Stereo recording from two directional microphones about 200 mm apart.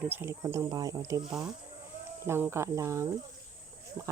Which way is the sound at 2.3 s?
10° right (ahead or behind).